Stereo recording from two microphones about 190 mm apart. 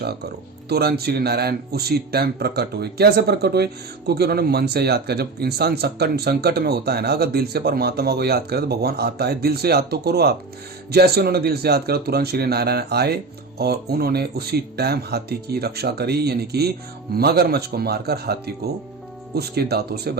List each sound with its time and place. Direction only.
0.7 s speech: 55° right (ahead or behind)